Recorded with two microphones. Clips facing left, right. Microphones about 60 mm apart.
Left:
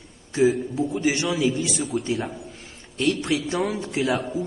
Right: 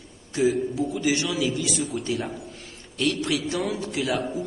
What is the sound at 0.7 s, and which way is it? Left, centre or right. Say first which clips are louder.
A man's voice: left 1 dB; left.